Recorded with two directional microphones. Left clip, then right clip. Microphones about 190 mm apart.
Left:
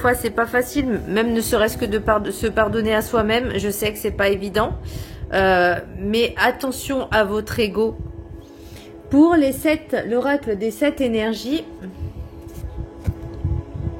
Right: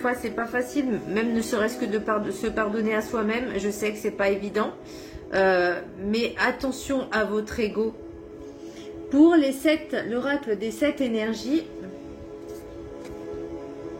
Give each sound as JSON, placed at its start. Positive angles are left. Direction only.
{"t": 0.0, "sound": "a woman's voice", "side_deg": 45}
{"t": 9.1, "sound": "speech", "side_deg": 50}